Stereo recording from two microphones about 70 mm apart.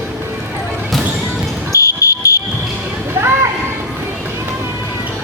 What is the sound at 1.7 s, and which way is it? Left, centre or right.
Fire alarm, left.